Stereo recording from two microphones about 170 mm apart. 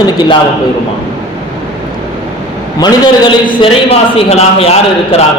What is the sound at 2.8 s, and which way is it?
A man's voice, 25° left (ahead or behind).